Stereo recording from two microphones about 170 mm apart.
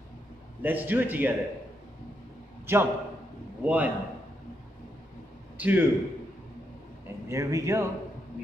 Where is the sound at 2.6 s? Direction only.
15° right (ahead or behind).